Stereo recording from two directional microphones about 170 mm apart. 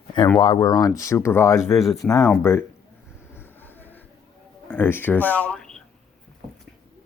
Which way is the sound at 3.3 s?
10° left (ahead or behind).